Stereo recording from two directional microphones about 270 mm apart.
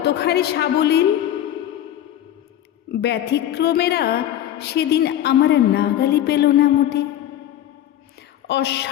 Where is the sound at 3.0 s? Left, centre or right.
Left.